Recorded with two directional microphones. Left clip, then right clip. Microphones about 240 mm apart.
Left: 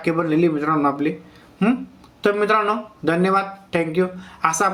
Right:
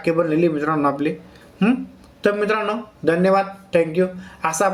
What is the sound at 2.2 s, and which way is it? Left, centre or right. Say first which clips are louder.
A man's voice: left 2 dB; centre.